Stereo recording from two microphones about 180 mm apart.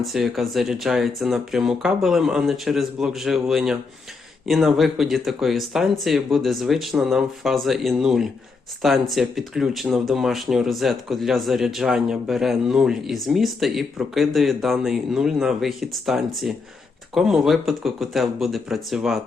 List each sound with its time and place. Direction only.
0.0 s speech: centre (ahead or behind)